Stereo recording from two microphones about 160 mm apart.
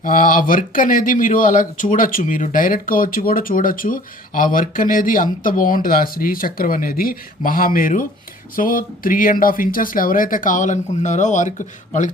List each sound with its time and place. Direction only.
0.0 s speech: 60° left (ahead or behind)